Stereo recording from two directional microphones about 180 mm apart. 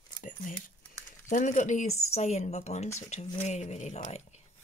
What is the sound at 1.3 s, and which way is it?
Speech, 45° left (ahead or behind).